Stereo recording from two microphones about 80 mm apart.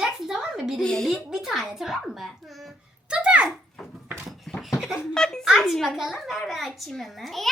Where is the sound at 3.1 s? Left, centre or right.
Centre.